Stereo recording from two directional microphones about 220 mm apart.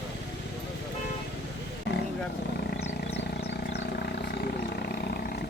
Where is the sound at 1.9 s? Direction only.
50° left (ahead or behind).